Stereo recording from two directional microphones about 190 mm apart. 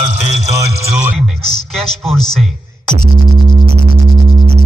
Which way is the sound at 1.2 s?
5° left (ahead or behind).